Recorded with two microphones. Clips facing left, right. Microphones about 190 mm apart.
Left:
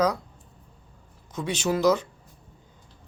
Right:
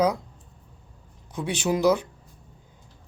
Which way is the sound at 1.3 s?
10° right (ahead or behind).